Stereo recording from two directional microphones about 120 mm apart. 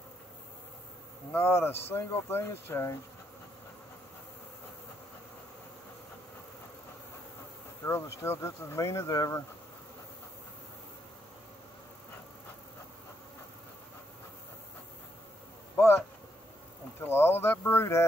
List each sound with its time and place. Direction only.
1.3 s speech: 20° left (ahead or behind)
7.8 s speech: 20° left (ahead or behind)
17.0 s a sound: 20° left (ahead or behind)